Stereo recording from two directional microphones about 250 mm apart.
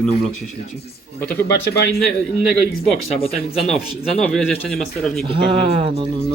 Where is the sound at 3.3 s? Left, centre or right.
Centre.